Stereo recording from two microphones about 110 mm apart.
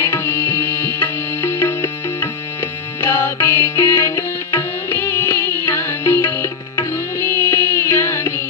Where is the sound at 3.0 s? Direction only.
20° left (ahead or behind).